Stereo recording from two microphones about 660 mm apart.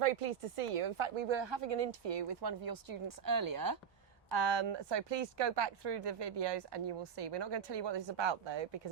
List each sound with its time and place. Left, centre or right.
0.0 s speech: right